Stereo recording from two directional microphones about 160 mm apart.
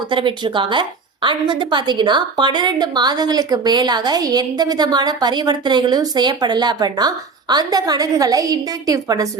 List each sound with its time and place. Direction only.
0.1 s a woman's voice: 30° right (ahead or behind)